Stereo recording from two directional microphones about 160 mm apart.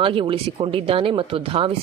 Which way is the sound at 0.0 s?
35° right (ahead or behind).